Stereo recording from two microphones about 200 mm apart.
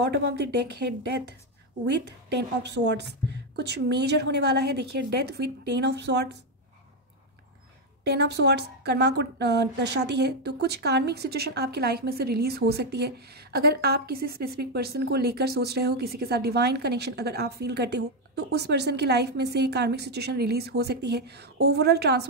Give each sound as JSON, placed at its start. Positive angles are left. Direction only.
{"t": 0.0, "sound": "a woman's voice", "side_deg": -55}
{"t": 8.0, "sound": "a woman's voice", "side_deg": -55}